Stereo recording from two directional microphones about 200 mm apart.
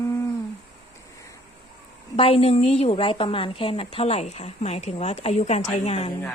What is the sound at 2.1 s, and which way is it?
A woman's voice, 30° left (ahead or behind).